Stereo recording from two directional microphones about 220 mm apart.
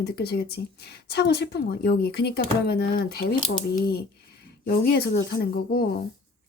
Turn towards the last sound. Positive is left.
turn(degrees=45)  # may be behind; listen again after turning